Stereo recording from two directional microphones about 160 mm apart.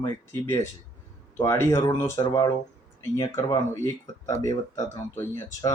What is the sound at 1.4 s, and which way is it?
Speech, 15° left (ahead or behind).